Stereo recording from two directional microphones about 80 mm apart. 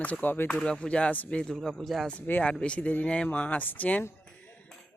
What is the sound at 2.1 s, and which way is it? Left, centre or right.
Speech, centre.